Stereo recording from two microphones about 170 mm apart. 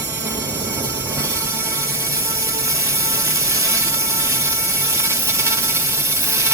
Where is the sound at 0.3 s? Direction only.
15° right (ahead or behind).